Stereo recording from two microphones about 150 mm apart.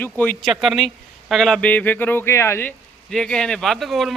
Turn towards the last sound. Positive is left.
turn(degrees=0)  # may be behind; listen again after turning